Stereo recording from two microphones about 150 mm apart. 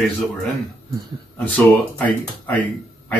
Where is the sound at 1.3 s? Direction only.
10° left (ahead or behind).